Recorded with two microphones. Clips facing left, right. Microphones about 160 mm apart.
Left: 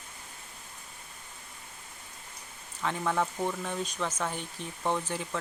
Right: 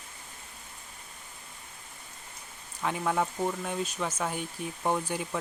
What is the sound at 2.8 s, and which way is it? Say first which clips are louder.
Speech: right 1 dB; 10° right (ahead or behind).